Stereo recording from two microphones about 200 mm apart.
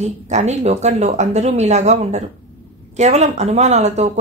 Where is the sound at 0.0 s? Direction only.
35° right (ahead or behind).